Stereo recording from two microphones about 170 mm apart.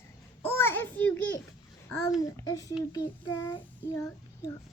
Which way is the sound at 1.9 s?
20° left (ahead or behind).